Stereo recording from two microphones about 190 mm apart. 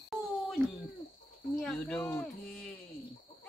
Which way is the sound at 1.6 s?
5° left (ahead or behind).